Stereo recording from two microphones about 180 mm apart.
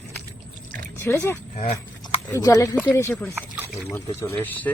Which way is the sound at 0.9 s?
15° left (ahead or behind).